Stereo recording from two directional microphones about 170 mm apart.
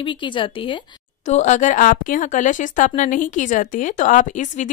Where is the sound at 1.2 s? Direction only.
45° left (ahead or behind).